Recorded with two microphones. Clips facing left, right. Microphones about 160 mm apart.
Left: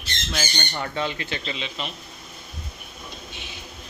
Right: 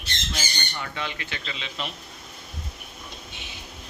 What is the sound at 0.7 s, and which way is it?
Speech, 40° left (ahead or behind).